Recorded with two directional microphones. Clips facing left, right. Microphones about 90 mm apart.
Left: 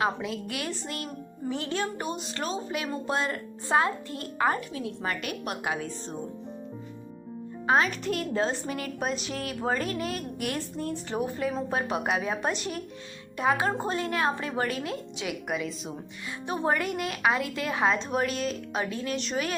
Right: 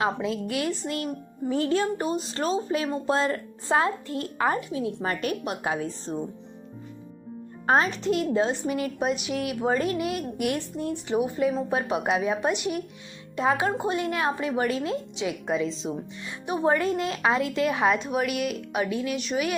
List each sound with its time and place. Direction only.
0.0 s a woman's voice: 25° right (ahead or behind)
5.0 s a woman's voice: 35° right (ahead or behind)
7.7 s a woman's voice: 30° right (ahead or behind); by 19.5 s 10° right (ahead or behind)